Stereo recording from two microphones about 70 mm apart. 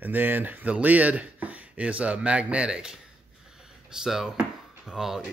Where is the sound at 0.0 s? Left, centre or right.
Right; by 3.0 s centre.